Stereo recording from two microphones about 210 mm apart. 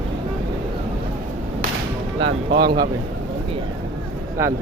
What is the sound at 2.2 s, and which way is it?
Speech, 20° right (ahead or behind).